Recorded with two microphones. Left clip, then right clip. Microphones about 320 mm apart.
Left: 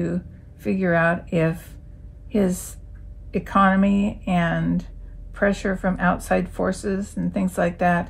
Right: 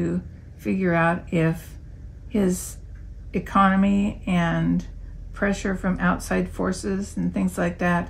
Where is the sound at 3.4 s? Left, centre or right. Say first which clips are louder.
Left 1 dB; centre.